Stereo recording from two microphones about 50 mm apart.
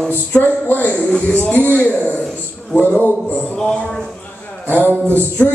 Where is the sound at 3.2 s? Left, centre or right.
Left.